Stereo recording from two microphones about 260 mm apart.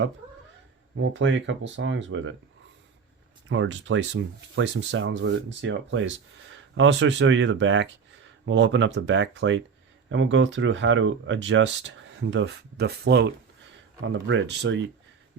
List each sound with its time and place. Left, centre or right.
0.9 s speech: right
3.5 s speech: right